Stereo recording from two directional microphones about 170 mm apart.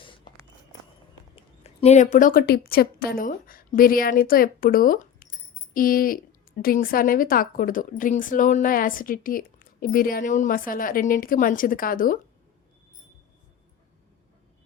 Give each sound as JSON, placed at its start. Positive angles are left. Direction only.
{"t": 1.4, "sound": "speech", "side_deg": 40}